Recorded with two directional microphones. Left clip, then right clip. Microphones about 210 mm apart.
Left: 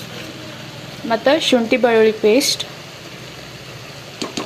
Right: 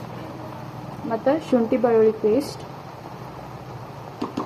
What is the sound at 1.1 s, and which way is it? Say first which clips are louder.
A woman's voice: left 7 dB; 25° left (ahead or behind).